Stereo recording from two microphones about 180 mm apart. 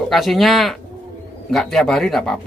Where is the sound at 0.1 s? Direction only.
Centre (ahead or behind).